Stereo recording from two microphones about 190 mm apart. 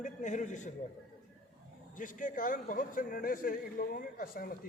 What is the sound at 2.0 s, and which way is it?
A man's voice, 45° left (ahead or behind).